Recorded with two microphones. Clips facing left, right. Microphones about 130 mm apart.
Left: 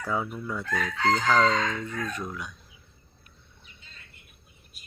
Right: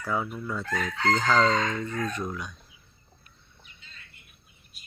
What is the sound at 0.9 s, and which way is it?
Chicken, 10° left (ahead or behind).